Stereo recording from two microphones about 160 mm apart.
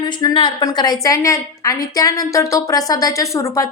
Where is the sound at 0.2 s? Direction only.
25° left (ahead or behind).